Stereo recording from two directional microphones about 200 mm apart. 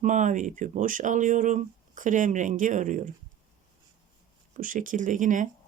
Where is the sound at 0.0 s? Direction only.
40° right (ahead or behind).